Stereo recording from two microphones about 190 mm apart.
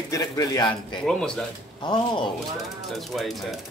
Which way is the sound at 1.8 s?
25° left (ahead or behind).